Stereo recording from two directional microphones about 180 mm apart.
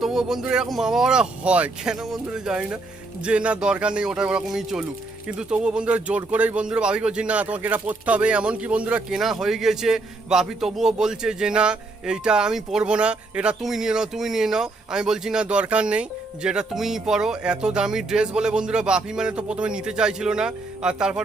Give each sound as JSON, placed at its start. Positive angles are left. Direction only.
{"t": 0.0, "sound": "speech", "side_deg": 0}